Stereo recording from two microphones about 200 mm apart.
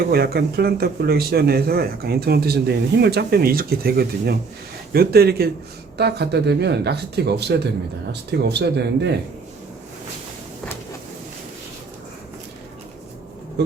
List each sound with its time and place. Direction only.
0.1 s speech: 50° right (ahead or behind)